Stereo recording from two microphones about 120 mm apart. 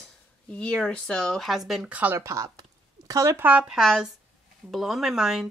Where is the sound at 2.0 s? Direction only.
15° right (ahead or behind).